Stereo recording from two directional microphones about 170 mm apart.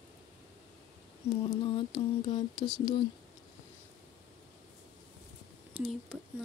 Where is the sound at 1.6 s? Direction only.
30° left (ahead or behind).